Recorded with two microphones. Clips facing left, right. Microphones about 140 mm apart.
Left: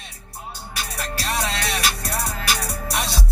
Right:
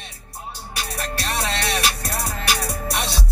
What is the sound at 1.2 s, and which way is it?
Music, 30° right (ahead or behind).